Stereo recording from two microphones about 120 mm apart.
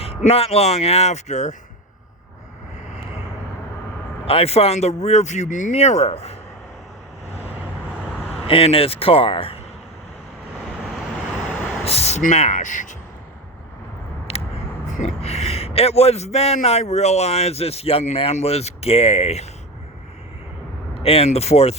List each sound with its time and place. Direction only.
0.2 s a man's voice: 55° left (ahead or behind); by 1.5 s 75° left (ahead or behind)
4.3 s a man's voice: 55° left (ahead or behind)
8.4 s speech: 50° left (ahead or behind)
11.9 s speech: 60° left (ahead or behind); by 13.0 s 90° left
14.3 s a sound: 60° left (ahead or behind)
15.0 s a man's voice: 65° left (ahead or behind)
20.9 s a man's voice: 55° left (ahead or behind)